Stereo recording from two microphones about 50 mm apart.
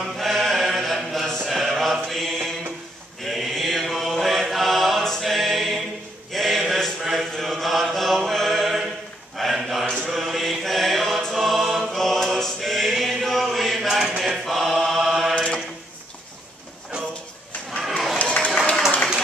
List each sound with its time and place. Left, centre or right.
0.0 s chant: centre
3.3 s mantra: centre
6.3 s chant: centre
9.4 s a sound: centre
10.0 s music: centre
14.2 s choir: centre
15.3 s mantra: centre
18.2 s a sound: left